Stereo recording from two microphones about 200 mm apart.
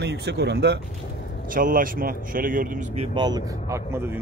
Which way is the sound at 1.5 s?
45° right (ahead or behind).